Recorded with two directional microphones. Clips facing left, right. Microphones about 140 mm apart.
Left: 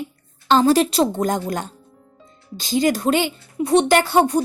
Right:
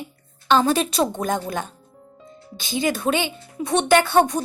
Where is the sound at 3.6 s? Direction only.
30° left (ahead or behind).